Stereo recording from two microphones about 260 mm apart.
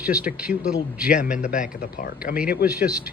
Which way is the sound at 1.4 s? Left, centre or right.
Left.